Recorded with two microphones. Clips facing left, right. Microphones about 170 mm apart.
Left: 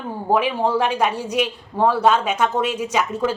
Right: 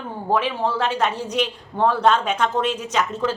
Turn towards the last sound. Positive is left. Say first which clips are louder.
# left 2 dB
turn(degrees=10)  # may be behind; listen again after turning